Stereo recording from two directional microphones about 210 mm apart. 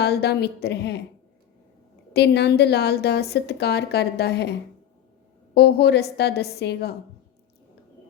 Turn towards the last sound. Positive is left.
turn(degrees=50)  # may be behind; listen again after turning